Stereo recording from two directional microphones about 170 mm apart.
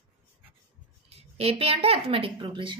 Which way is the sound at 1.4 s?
35° right (ahead or behind).